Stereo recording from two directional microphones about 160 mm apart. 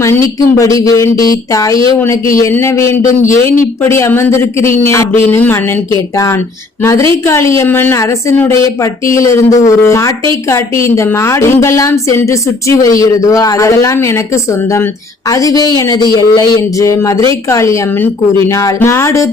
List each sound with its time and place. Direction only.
0.0 s a woman's voice: 20° left (ahead or behind)
6.8 s a woman's voice: 20° left (ahead or behind)
15.3 s speech: 20° left (ahead or behind)